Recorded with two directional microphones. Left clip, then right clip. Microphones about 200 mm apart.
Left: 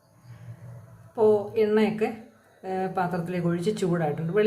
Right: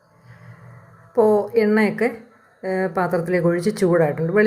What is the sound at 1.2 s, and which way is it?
A woman's voice, 35° right (ahead or behind).